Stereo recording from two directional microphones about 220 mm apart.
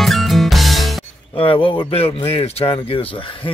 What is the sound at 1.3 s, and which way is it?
Speech, 25° left (ahead or behind).